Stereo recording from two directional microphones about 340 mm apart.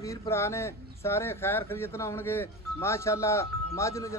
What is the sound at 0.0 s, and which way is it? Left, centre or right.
Speech, centre.